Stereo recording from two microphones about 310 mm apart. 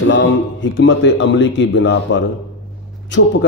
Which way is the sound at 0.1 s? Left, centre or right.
Left.